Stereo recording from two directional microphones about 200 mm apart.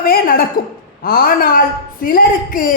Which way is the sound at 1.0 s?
45° left (ahead or behind).